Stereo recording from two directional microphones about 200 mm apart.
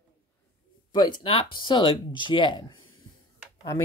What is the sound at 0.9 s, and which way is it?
Speech, 25° left (ahead or behind).